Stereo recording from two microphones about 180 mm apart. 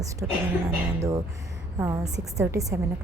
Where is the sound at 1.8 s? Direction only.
15° right (ahead or behind).